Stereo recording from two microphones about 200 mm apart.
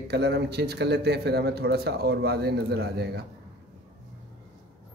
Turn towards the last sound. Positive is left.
turn(degrees=-55)  # may be behind; listen again after turning